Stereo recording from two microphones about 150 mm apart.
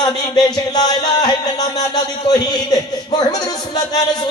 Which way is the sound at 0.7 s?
25° left (ahead or behind).